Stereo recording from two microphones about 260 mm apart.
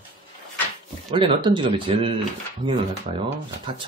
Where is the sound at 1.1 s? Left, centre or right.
Centre.